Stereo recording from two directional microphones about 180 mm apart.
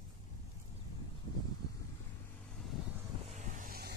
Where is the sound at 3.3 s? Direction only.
45° right (ahead or behind); by 3.9 s 60° right (ahead or behind).